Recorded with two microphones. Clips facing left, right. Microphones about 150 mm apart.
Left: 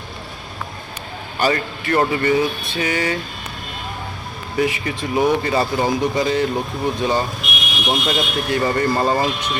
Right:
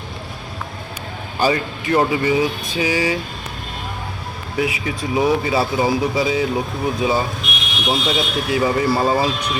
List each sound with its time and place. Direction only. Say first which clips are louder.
1.4 s speech: right 1 dB; 10° right (ahead or behind)
4.5 s speech: left 1 dB; 5° right (ahead or behind)